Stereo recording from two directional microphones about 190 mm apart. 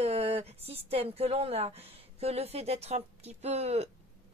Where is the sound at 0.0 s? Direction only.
35° right (ahead or behind).